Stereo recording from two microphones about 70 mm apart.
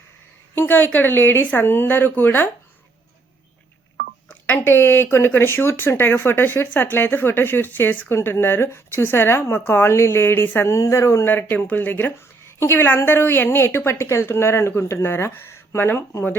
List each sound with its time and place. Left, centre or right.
0.5 s speech: left
4.5 s speech: left
10.7 s speech: left